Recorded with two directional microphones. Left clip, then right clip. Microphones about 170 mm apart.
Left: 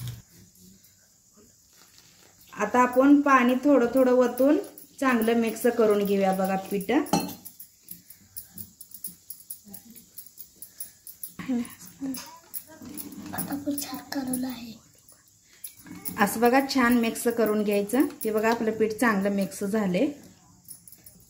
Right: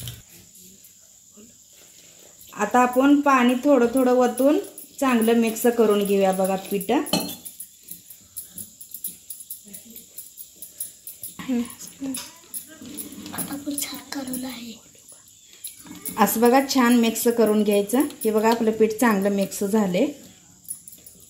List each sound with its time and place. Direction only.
2.5 s speech: 30° right (ahead or behind)
13.7 s a sound: 40° left (ahead or behind)
16.2 s speech: 25° right (ahead or behind)